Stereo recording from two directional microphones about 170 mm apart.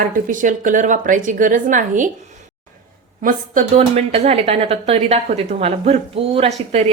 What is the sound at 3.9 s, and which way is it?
A woman's voice, 35° right (ahead or behind).